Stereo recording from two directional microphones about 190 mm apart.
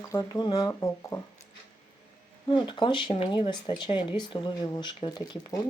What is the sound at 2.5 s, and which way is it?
Speech, 25° left (ahead or behind).